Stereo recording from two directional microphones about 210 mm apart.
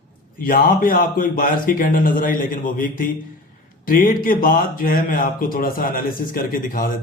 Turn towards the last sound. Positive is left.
turn(degrees=40)  # may be behind; listen again after turning